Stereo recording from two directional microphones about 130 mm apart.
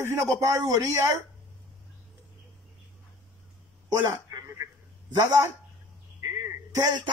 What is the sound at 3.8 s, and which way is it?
Telephone, 25° right (ahead or behind).